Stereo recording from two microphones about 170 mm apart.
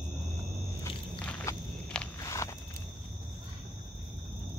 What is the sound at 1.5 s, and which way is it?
Walk, 15° left (ahead or behind).